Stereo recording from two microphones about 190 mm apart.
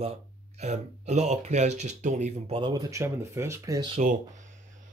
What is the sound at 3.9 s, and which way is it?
Speech, 40° right (ahead or behind).